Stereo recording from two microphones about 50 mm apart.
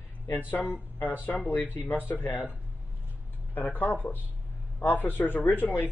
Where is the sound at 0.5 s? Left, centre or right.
Left.